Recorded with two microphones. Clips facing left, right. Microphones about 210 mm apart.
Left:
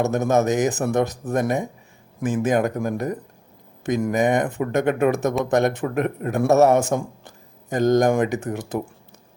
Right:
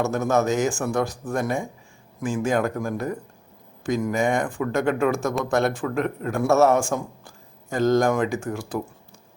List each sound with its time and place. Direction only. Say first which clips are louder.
0.0 s a man's voice: left 2 dB; 20° left (ahead or behind)